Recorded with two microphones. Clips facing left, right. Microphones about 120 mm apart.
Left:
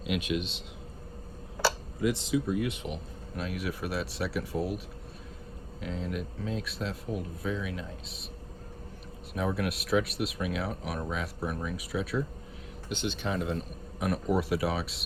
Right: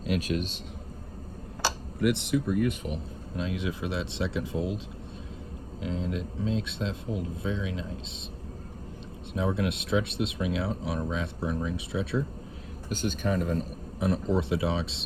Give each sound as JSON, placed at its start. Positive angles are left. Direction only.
{"t": 0.1, "sound": "a man's voice", "side_deg": -40}
{"t": 2.0, "sound": "speech", "side_deg": -65}
{"t": 3.3, "sound": "speech", "side_deg": -25}
{"t": 5.8, "sound": "speech", "side_deg": -25}
{"t": 9.6, "sound": "speech", "side_deg": -25}
{"t": 12.9, "sound": "speech", "side_deg": -45}
{"t": 14.0, "sound": "speech", "side_deg": -25}